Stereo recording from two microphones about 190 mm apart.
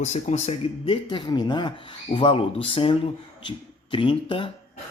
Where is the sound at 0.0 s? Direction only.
35° left (ahead or behind).